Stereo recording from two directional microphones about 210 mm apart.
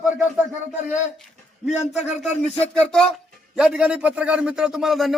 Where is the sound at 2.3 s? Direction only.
30° left (ahead or behind).